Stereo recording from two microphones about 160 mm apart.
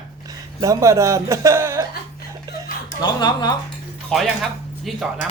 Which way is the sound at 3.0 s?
25° left (ahead or behind).